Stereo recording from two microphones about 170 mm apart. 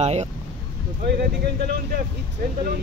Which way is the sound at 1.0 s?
70° right (ahead or behind).